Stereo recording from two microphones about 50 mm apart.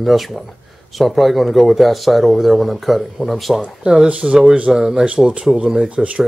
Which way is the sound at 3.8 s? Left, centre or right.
Centre.